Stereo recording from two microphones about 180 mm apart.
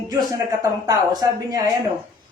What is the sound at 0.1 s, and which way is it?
Speech, 20° right (ahead or behind).